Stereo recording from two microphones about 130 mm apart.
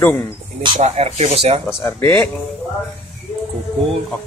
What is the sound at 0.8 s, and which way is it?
Speech, 55° right (ahead or behind).